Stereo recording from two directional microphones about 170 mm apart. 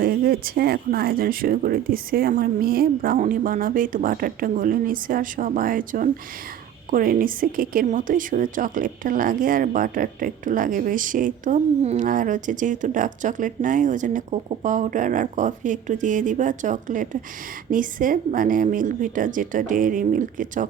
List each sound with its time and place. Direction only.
0.0 s speech: 60° right (ahead or behind)